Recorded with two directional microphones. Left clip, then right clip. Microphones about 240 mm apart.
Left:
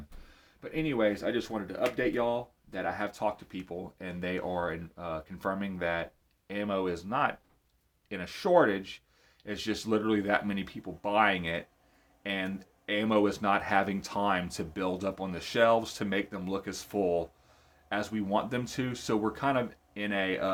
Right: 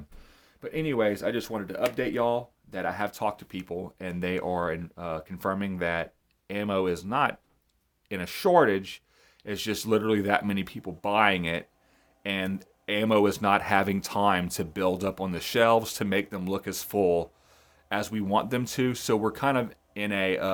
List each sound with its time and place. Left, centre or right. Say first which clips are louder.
0.6 s speech: right 3 dB; right